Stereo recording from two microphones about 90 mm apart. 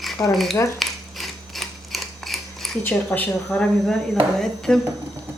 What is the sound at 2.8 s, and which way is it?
Speech, 20° left (ahead or behind).